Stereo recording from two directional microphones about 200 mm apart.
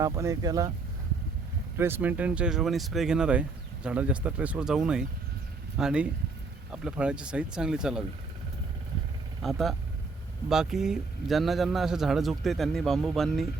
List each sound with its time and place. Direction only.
0.0 s speech: 15° right (ahead or behind)
1.8 s a man's voice: 10° right (ahead or behind)
9.4 s a man's voice: centre (ahead or behind)